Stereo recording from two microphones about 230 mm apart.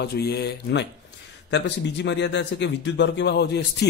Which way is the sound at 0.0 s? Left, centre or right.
Left.